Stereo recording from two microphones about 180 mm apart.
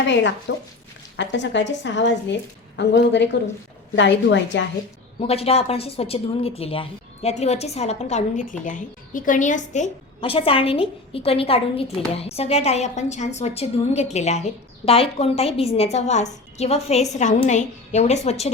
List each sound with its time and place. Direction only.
0.1 s a woman's voice: 80° left
5.2 s a woman's voice: 35° left (ahead or behind)